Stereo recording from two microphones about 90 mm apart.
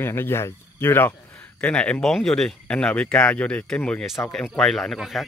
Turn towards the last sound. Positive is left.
turn(degrees=0)  # may be behind; listen again after turning